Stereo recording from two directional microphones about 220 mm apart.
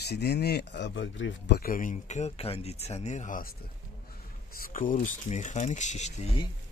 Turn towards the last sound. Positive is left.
turn(degrees=30)  # may be behind; listen again after turning